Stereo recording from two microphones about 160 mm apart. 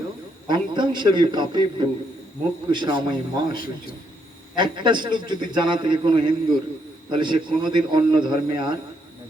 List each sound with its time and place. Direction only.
0.4 s a man's voice: 30° right (ahead or behind)